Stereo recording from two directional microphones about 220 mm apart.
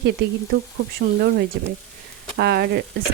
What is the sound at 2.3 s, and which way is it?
Speech, 45° right (ahead or behind).